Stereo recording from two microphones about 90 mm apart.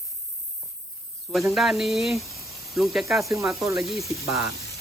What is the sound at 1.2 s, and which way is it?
Speech, centre (ahead or behind).